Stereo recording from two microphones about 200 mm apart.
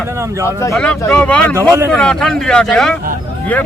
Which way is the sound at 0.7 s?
5° left (ahead or behind).